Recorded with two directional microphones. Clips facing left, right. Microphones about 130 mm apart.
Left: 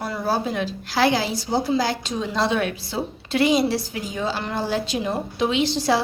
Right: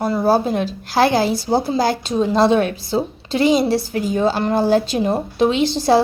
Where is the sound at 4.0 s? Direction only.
45° right (ahead or behind).